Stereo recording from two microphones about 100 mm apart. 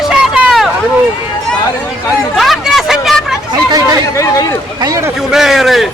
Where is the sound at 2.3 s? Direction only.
Centre (ahead or behind).